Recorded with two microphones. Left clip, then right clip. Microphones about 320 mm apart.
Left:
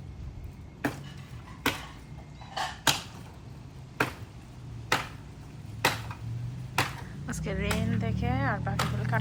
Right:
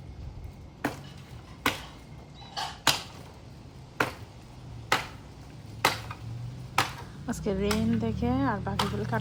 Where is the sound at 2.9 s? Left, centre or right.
Centre.